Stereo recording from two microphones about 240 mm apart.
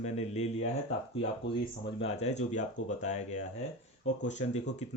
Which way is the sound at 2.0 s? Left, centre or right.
Left.